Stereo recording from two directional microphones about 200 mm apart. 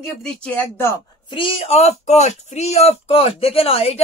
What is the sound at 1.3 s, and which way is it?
Speech, 25° left (ahead or behind).